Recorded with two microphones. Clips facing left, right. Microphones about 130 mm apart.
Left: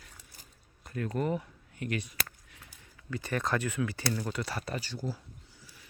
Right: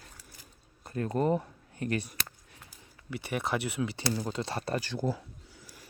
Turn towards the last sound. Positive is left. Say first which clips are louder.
# right 5 dB
turn(degrees=-55)  # may be behind; listen again after turning